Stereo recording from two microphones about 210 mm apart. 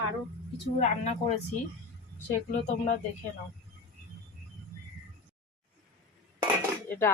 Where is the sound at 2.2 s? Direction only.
35° left (ahead or behind).